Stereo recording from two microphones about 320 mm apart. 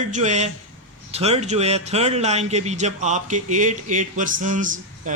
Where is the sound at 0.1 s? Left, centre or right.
Right.